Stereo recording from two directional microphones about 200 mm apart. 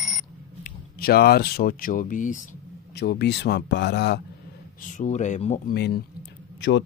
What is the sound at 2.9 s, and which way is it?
Speech, 55° left (ahead or behind).